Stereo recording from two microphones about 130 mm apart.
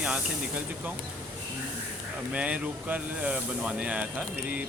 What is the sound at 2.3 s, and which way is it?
Speech, 10° right (ahead or behind).